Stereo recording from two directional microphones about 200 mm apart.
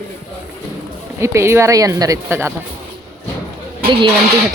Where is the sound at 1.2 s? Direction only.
15° right (ahead or behind).